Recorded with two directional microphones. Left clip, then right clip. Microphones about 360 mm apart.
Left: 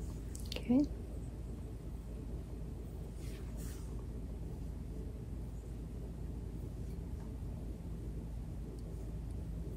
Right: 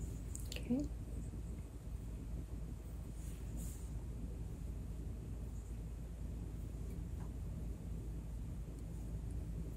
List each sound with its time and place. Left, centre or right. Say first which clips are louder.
0.5 s squish: left 8 dB; left